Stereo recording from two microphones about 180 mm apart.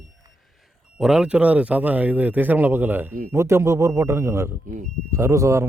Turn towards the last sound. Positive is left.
turn(degrees=-15)  # may be behind; listen again after turning